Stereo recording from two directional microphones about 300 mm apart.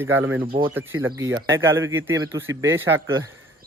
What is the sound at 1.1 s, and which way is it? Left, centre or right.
Speech, right.